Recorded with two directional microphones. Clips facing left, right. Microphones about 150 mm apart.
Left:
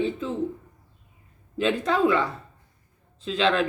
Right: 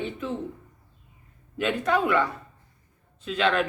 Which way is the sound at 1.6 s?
30° left (ahead or behind).